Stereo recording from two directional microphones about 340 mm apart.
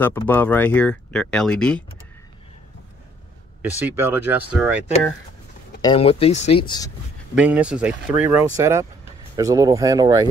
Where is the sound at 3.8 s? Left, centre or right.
Centre.